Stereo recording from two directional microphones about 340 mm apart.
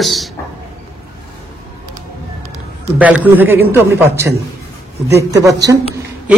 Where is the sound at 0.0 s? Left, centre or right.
Centre.